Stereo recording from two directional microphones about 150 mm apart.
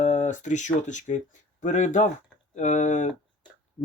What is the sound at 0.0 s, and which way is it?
Speech, 55° left (ahead or behind).